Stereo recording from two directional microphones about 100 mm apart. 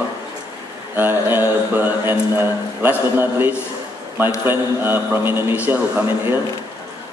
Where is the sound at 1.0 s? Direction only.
20° right (ahead or behind).